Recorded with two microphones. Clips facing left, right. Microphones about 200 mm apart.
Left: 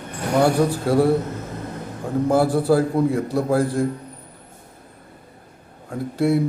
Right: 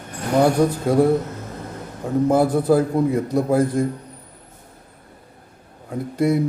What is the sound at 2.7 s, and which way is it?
Speech, centre (ahead or behind).